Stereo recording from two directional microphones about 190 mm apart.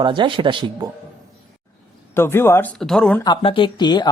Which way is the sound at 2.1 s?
15° left (ahead or behind).